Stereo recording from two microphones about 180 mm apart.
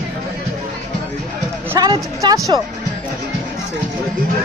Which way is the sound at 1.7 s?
20° right (ahead or behind).